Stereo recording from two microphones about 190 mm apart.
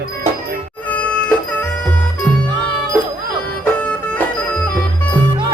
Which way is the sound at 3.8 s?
10° left (ahead or behind).